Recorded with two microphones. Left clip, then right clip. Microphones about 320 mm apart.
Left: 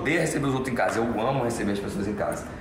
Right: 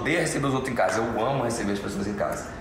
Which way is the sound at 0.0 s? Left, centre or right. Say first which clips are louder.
Even; centre.